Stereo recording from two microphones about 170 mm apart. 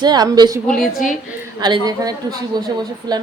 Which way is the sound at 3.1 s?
25° right (ahead or behind).